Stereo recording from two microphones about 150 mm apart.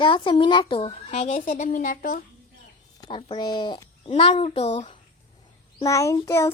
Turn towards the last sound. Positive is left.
turn(degrees=20)  # may be behind; listen again after turning